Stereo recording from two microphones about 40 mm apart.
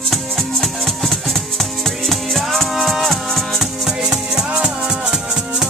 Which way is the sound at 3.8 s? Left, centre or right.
Centre.